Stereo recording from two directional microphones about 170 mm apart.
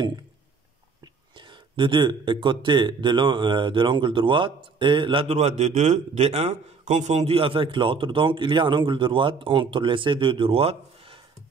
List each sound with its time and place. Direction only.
1.5 s speech: 30° right (ahead or behind)